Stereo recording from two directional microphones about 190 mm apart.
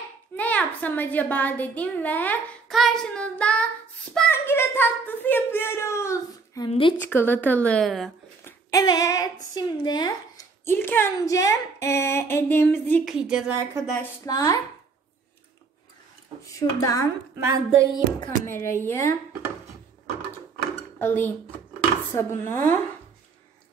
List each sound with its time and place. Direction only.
0.4 s speech: 5° left (ahead or behind)
6.7 s a woman's voice: 25° left (ahead or behind)
7.0 s speech: 10° left (ahead or behind)
8.5 s speech: 15° left (ahead or behind)
13.1 s speech: 5° right (ahead or behind)
14.2 s speech: 20° left (ahead or behind)
16.4 s speech: 15° left (ahead or behind)
20.5 s dishes: 10° left (ahead or behind)
22.1 s speech: 15° left (ahead or behind)